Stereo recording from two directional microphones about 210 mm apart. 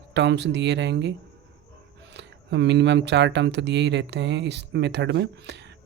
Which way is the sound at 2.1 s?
55° right (ahead or behind).